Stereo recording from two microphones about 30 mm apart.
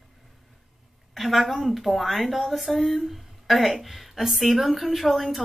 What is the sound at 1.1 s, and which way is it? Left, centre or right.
Speech, centre.